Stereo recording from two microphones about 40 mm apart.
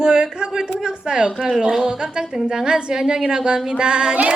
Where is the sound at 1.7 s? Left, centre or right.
Centre.